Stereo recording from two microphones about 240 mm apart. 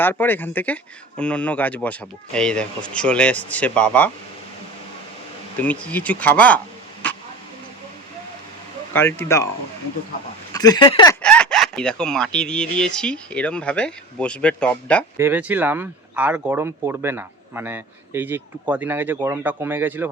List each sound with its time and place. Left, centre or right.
0.0 s speech: centre
5.5 s speech: centre
7.0 s a sound: centre
8.9 s speech: centre
10.5 s speech: centre
11.2 s speech: centre
15.2 s speech: centre